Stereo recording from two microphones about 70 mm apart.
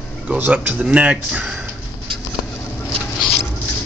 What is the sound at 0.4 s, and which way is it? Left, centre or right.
Speech, right.